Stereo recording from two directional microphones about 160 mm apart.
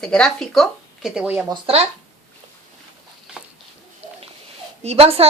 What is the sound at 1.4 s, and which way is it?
Speech, 30° right (ahead or behind).